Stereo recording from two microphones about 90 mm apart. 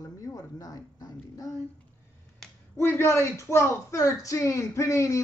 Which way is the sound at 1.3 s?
35° left (ahead or behind).